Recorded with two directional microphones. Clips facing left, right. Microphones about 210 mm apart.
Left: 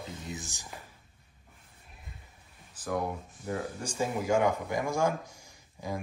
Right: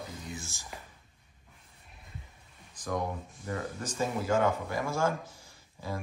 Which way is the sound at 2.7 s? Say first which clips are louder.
Left 1 dB; 10° left (ahead or behind).